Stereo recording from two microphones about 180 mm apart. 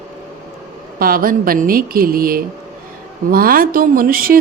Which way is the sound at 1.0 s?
55° right (ahead or behind).